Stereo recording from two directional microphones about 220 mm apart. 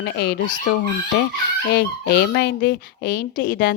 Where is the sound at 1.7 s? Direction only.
45° left (ahead or behind).